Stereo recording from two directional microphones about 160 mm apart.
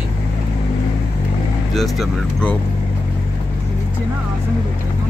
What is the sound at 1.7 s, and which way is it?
Speech, centre (ahead or behind).